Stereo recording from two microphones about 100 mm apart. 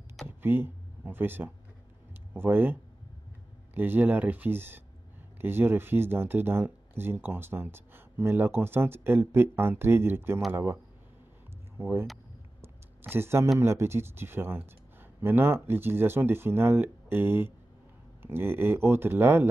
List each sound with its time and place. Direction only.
0.4 s speech: 20° right (ahead or behind)
11.8 s speech: 25° right (ahead or behind)
12.6 s a sound: 20° right (ahead or behind)
13.6 s speech: 25° right (ahead or behind)